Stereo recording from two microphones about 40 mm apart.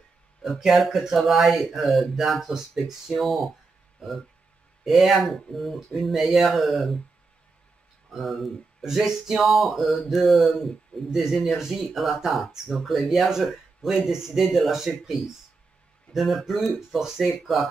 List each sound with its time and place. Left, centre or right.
0.6 s speech: centre
4.8 s speech: centre
8.1 s speech: centre
8.8 s speech: centre
9.4 s speech: centre
16.1 s speech: centre